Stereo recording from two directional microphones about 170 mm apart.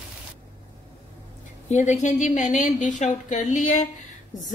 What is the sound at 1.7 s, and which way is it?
A woman's voice, 45° left (ahead or behind).